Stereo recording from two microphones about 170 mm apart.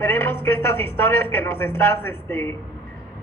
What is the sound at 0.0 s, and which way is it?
A man's voice, 15° left (ahead or behind).